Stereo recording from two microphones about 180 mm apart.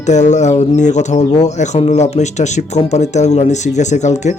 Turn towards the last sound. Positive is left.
turn(degrees=40)  # may be behind; listen again after turning